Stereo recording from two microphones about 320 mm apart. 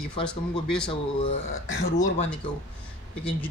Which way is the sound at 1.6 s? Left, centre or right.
Left.